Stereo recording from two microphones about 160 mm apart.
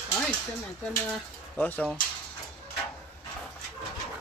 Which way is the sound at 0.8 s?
10° left (ahead or behind).